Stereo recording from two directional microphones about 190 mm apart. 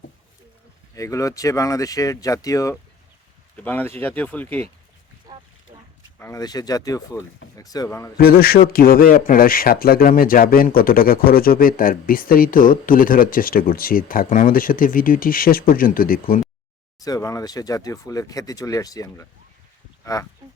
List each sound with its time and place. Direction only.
0.9 s speech: 15° left (ahead or behind)
5.3 s wild animals: 20° right (ahead or behind)
6.1 s speech: 15° left (ahead or behind)
8.1 s speech: 55° left (ahead or behind)
17.0 s speech: 20° left (ahead or behind)